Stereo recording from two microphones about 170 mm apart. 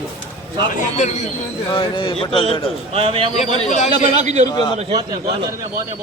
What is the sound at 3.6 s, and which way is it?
Speech, 45° left (ahead or behind).